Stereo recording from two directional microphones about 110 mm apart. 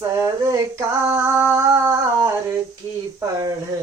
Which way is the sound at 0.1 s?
30° right (ahead or behind).